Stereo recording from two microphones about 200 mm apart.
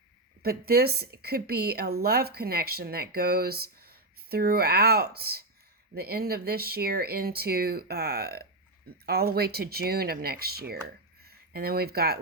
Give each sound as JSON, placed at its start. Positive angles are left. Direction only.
{"t": 0.4, "sound": "a woman's voice", "side_deg": -50}